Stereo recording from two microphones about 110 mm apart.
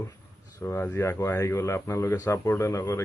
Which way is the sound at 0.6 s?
20° left (ahead or behind).